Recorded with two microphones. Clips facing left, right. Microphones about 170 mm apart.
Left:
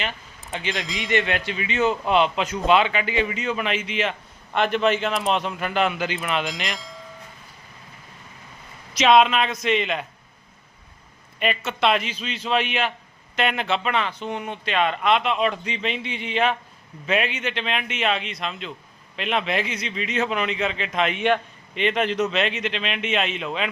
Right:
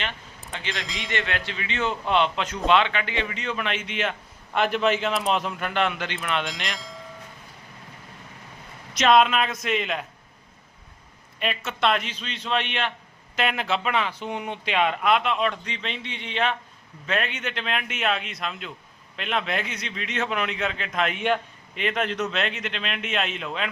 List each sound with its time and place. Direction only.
0.5 s a man's voice: 20° left (ahead or behind); by 7.0 s centre (ahead or behind)
8.9 s speech: centre (ahead or behind)
11.3 s speech: centre (ahead or behind)